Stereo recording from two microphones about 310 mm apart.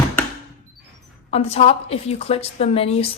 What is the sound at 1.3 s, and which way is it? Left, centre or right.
A woman's voice, centre.